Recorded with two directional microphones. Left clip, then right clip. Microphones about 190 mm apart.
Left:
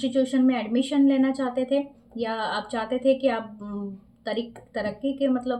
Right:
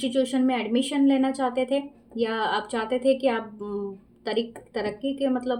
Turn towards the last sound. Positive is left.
turn(degrees=-35)  # may be behind; listen again after turning